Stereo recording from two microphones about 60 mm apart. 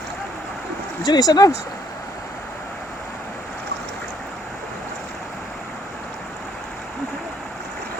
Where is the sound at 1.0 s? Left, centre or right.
Left.